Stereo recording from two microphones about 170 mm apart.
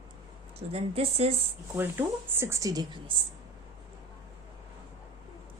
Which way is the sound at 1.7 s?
10° right (ahead or behind).